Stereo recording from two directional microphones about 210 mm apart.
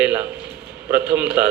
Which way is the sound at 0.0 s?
5° right (ahead or behind).